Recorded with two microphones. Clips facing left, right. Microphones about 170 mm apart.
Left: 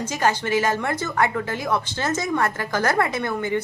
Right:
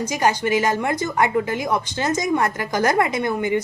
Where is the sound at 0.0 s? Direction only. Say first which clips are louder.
Right 2 dB; 15° right (ahead or behind).